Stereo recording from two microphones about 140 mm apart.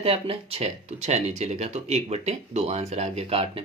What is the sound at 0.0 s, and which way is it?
Speech, 45° right (ahead or behind).